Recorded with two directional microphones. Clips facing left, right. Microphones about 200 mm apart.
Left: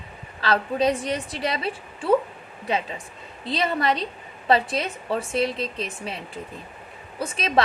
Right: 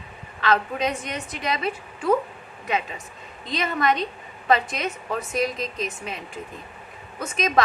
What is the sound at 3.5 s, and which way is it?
A woman's voice, 30° left (ahead or behind).